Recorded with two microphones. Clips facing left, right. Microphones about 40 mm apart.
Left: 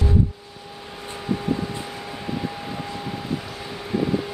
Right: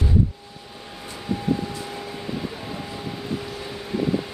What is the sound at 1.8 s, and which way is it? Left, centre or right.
Vehicle, centre.